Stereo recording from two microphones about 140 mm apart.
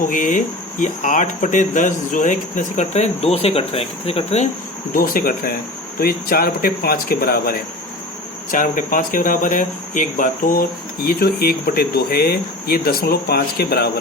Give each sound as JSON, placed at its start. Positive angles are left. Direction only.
{"t": 0.0, "sound": "speech", "side_deg": 70}
{"t": 4.9, "sound": "speech", "side_deg": 90}
{"t": 8.4, "sound": "speech", "side_deg": 75}